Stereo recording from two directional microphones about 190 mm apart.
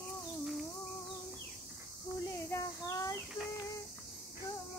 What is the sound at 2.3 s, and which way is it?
Child singing, 15° left (ahead or behind).